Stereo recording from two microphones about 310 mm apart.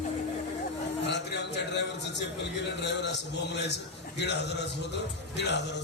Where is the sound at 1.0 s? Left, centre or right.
Left.